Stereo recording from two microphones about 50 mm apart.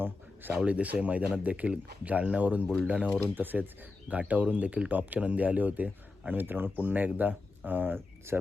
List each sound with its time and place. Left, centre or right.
0.6 s speech: right
3.3 s speech: right